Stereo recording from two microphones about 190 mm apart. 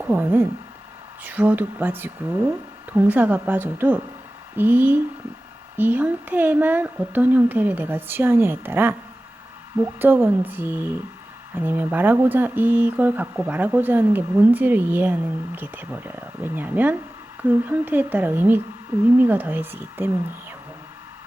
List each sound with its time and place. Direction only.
0.0 s speech: 10° right (ahead or behind)